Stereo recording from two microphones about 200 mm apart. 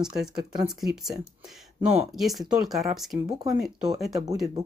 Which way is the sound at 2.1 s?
Centre (ahead or behind).